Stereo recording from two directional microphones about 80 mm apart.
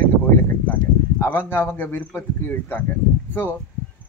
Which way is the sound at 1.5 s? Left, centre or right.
Left.